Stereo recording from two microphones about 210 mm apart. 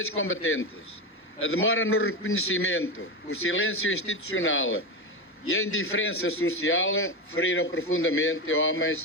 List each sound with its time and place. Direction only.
0.2 s a man's voice: 75° left (ahead or behind)
5.5 s a man's voice: 85° left